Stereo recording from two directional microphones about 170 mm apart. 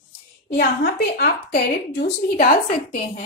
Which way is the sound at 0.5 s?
65° left (ahead or behind).